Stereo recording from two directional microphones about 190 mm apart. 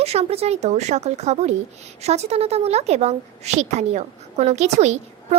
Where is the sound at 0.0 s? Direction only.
35° right (ahead or behind).